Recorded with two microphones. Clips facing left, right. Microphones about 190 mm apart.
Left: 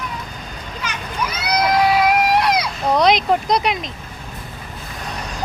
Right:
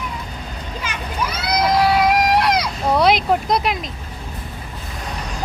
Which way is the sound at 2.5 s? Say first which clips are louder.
Even; 5° right (ahead or behind).